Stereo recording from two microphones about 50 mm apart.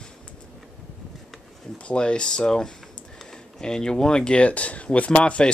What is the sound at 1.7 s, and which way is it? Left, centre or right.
Speech, left.